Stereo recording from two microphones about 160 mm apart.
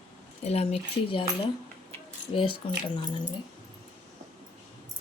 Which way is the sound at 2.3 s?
30° left (ahead or behind).